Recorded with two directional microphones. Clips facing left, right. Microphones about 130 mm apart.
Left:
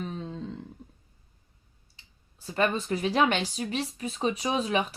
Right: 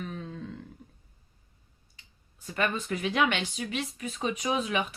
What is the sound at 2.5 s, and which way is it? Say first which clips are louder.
Speech: left 3 dB; 30° left (ahead or behind).